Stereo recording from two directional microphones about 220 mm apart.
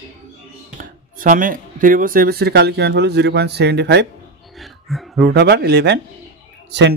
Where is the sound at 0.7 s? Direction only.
35° right (ahead or behind).